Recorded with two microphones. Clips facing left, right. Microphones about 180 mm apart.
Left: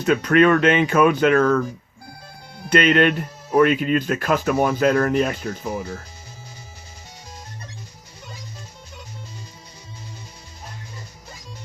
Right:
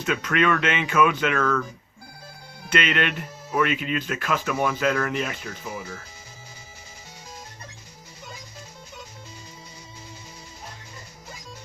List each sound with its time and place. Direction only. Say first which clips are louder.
0.0 s speech: left 8 dB; 40° left (ahead or behind)
2.6 s speech: left 8 dB; 40° left (ahead or behind)